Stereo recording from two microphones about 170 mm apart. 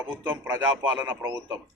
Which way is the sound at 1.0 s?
25° right (ahead or behind).